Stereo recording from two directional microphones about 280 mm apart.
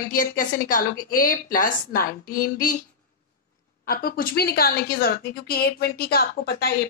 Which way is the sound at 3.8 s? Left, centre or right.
Left.